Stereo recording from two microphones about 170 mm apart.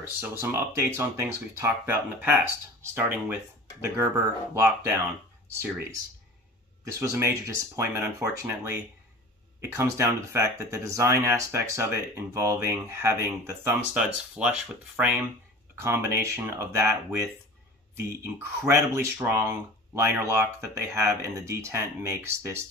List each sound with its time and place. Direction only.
0.2 s speech: 15° right (ahead or behind)
4.6 s speech: 15° right (ahead or behind)
7.0 s speech: 15° right (ahead or behind)
17.9 s speech: 15° right (ahead or behind)